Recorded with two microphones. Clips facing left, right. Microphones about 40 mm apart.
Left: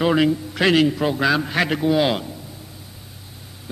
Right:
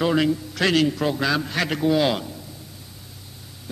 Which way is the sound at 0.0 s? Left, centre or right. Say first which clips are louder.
Left 3 dB; centre.